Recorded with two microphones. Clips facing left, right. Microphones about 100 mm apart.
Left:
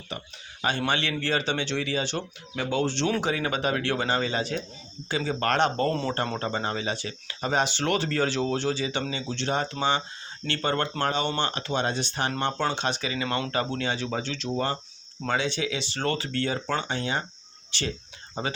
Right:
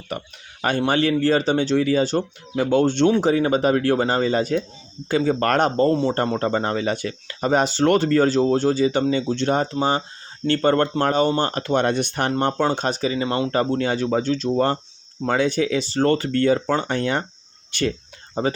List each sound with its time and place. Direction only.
0.1 s speech: 55° right (ahead or behind)
0.9 s speech: 40° right (ahead or behind)
3.2 s speech: 35° right (ahead or behind)
5.7 s speech: 30° right (ahead or behind)
6.4 s speech: 45° right (ahead or behind)
13.2 s speech: 25° right (ahead or behind)
13.5 s speech: 45° right (ahead or behind)
18.4 s speech: 40° right (ahead or behind)